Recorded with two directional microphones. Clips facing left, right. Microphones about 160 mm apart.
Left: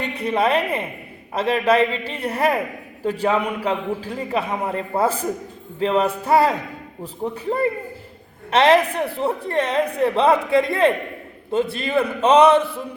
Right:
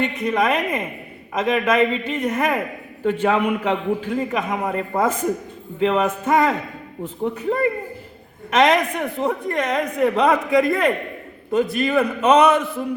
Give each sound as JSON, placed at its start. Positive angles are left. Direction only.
{"t": 0.1, "sound": "a man's voice", "side_deg": 30}